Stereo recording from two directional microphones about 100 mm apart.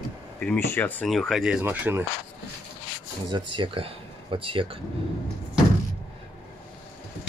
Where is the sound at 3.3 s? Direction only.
50° right (ahead or behind).